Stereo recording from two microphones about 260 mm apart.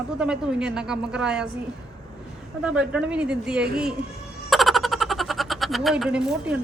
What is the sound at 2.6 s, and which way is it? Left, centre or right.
A woman's voice, centre.